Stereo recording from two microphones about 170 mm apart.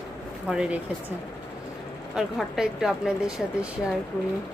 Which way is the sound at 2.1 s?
Centre (ahead or behind).